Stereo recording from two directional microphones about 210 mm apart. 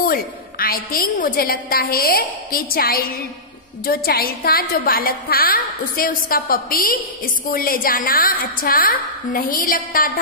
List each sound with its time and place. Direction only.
0.0 s a woman's voice: 45° left (ahead or behind)